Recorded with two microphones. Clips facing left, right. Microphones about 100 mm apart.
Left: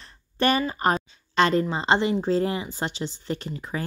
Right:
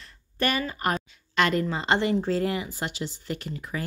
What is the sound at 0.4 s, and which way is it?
A woman's voice, 30° left (ahead or behind).